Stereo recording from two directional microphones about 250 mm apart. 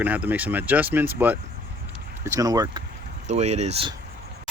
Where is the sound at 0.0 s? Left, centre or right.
Centre.